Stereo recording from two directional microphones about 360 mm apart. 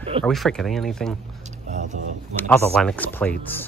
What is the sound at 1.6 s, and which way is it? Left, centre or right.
Speech, centre.